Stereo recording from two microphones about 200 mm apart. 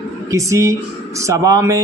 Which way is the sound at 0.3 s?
15° right (ahead or behind).